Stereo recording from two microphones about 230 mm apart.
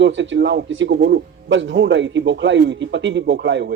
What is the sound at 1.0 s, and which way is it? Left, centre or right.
Speech, right.